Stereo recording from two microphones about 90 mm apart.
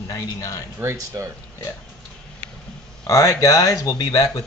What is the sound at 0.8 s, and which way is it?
Speech, 30° right (ahead or behind).